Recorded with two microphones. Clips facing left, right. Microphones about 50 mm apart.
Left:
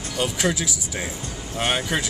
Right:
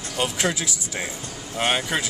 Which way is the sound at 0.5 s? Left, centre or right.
Centre.